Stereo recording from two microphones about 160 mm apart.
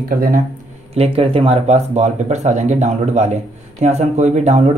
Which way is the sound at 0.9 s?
35° right (ahead or behind).